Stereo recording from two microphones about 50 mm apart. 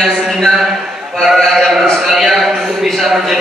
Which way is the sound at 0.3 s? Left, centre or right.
Centre.